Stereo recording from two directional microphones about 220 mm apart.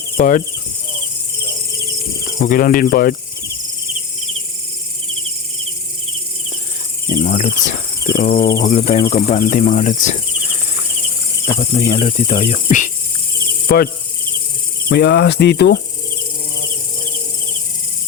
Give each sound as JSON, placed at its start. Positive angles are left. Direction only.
{"t": 0.2, "sound": "speech", "side_deg": 40}
{"t": 2.4, "sound": "speech", "side_deg": 40}
{"t": 7.2, "sound": "speech", "side_deg": 35}
{"t": 8.1, "sound": "cricket", "side_deg": 40}
{"t": 8.7, "sound": "speech", "side_deg": 30}
{"t": 11.7, "sound": "speech", "side_deg": 35}
{"t": 13.7, "sound": "insect", "side_deg": 45}
{"t": 14.8, "sound": "cricket", "side_deg": 50}